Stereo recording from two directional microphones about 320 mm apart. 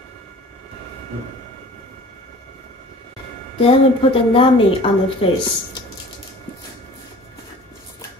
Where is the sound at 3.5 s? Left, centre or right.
Centre.